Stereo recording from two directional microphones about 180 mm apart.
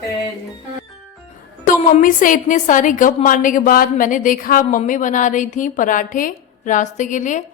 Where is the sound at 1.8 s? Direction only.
50° left (ahead or behind).